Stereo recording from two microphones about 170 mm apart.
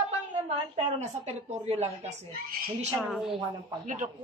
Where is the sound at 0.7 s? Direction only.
40° right (ahead or behind).